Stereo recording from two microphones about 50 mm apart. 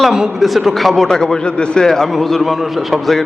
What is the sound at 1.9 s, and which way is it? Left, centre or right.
A man's voice, centre.